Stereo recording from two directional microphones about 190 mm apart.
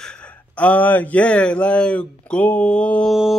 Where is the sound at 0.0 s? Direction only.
5° left (ahead or behind).